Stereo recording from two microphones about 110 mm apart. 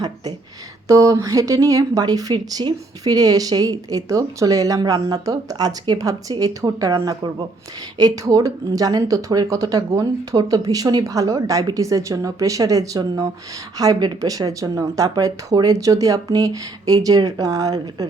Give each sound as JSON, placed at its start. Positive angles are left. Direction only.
{"t": 0.9, "sound": "speech", "side_deg": -30}